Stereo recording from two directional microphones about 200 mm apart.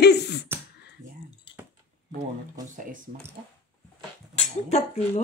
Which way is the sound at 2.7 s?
40° right (ahead or behind).